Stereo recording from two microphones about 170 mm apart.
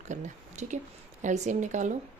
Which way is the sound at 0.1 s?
45° right (ahead or behind).